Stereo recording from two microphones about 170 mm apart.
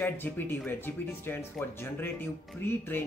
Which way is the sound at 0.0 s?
10° left (ahead or behind).